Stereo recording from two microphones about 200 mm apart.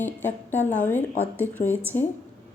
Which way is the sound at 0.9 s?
10° left (ahead or behind).